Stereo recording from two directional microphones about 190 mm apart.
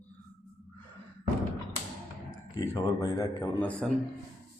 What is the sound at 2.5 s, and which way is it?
Speech, 15° left (ahead or behind).